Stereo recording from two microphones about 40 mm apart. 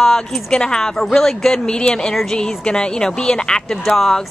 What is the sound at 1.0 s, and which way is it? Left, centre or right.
Speech, centre.